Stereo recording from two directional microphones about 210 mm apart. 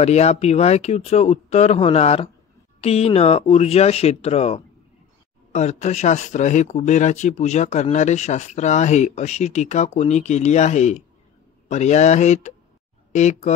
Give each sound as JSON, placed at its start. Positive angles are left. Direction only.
{"t": 0.0, "sound": "speech", "side_deg": 30}